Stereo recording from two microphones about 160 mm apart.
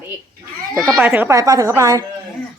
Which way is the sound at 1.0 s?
15° right (ahead or behind).